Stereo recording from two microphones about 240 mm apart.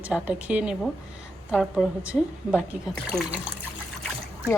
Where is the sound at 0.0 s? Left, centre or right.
Centre.